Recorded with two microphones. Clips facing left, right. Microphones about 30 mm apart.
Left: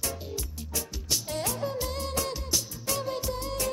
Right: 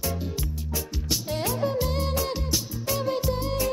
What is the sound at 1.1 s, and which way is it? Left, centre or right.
Music, centre.